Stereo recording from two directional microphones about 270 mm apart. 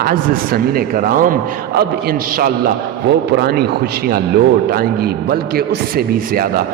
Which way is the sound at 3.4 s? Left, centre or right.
Right.